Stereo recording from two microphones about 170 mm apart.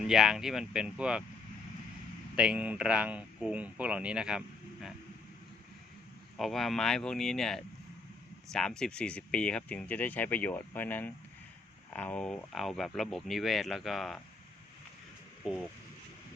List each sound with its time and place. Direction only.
0.1 s speech: centre (ahead or behind)
2.3 s speech: 5° right (ahead or behind)
6.3 s speech: centre (ahead or behind)
15.4 s speech: 5° right (ahead or behind)